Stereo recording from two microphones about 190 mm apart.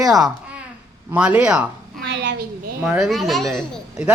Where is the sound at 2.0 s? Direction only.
70° right (ahead or behind).